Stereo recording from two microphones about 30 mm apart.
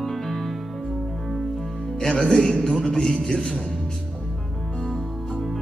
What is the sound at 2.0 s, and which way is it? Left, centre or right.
A man's voice, centre.